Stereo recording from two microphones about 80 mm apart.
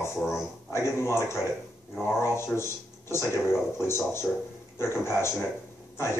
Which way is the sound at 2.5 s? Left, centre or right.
Left.